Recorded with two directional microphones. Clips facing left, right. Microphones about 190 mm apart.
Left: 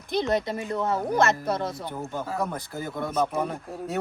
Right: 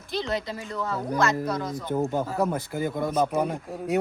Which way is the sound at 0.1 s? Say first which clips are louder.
Left 4 dB; 20° left (ahead or behind).